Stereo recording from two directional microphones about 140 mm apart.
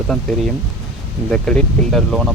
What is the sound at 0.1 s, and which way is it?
Speech, 5° left (ahead or behind).